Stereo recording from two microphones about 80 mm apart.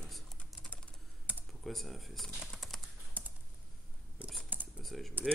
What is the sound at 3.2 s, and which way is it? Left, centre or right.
Computer keyboard, right.